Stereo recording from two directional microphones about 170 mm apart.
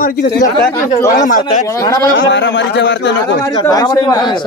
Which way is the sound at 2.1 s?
90° left.